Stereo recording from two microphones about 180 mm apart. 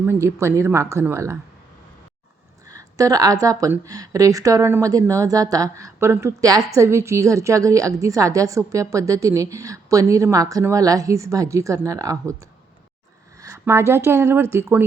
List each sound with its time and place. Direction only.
0.0 s a woman's voice: 15° right (ahead or behind)
2.6 s a woman's voice: 20° right (ahead or behind)
13.4 s a woman's voice: 15° right (ahead or behind)